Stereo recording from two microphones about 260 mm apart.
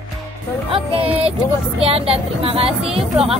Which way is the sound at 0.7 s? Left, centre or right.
Right.